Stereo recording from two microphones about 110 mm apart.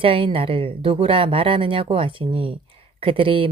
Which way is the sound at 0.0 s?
55° right (ahead or behind).